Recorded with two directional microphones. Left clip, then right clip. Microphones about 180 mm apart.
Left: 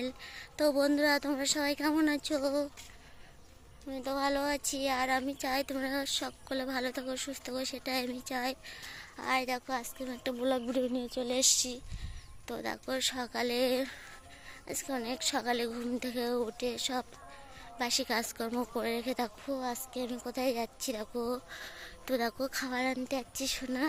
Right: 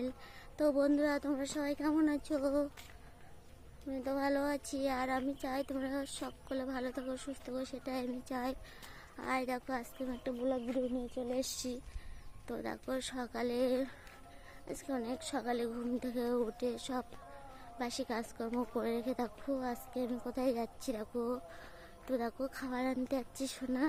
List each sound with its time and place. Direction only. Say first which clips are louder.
0.0 s speech: left 3 dB; 5° right (ahead or behind)
2.4 s a woman's voice: even; 10° right (ahead or behind)
3.9 s speech: left 3 dB; 10° right (ahead or behind)
10.7 s speech: left 4 dB; 15° left (ahead or behind)
12.5 s speech: left 4 dB; 5° right (ahead or behind)
18.7 s speech: left 3 dB; 5° right (ahead or behind)
19.5 s a woman's voice: left 2 dB; 15° right (ahead or behind)
23.0 s a woman's voice: left 3 dB; 15° right (ahead or behind)